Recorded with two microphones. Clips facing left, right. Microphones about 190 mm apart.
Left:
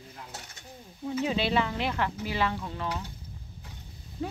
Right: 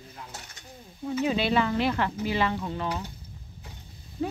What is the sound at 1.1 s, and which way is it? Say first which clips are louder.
Speech: right 2 dB; 25° left (ahead or behind).